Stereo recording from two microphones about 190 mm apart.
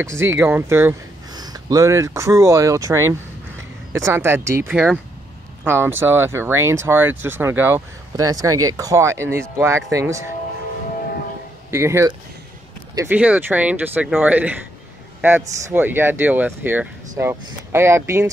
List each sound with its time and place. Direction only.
0.0 s speech: 15° right (ahead or behind)
11.7 s speech: 15° right (ahead or behind)